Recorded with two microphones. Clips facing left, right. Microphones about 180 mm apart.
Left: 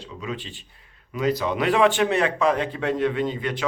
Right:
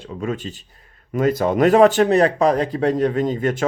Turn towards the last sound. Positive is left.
turn(degrees=-45)  # may be behind; listen again after turning